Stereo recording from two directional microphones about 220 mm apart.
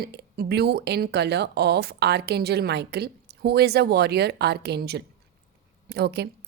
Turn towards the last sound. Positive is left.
turn(degrees=-50)  # may be behind; listen again after turning